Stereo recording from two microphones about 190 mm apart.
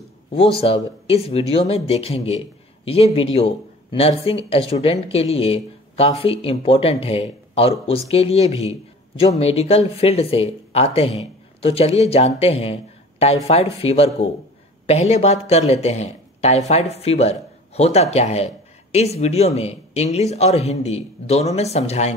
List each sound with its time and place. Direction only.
0.6 s speech: 30° left (ahead or behind)